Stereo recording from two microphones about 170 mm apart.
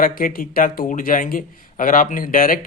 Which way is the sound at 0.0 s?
55° left (ahead or behind).